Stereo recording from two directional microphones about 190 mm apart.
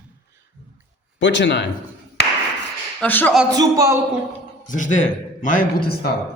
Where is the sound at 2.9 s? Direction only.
10° left (ahead or behind).